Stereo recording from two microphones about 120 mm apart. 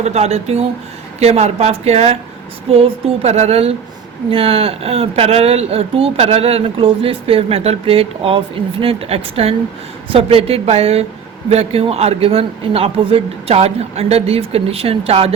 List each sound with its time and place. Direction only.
0.0 s speech: 65° right (ahead or behind)
3.2 s speech: 65° right (ahead or behind)
4.3 s speech: 50° right (ahead or behind)